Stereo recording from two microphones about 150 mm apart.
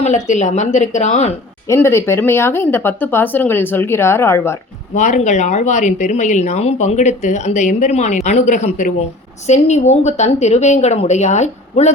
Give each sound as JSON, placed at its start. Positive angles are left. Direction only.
{"t": 0.0, "sound": "speech", "side_deg": 50}
{"t": 1.6, "sound": "speech", "side_deg": 15}
{"t": 4.9, "sound": "speech", "side_deg": 55}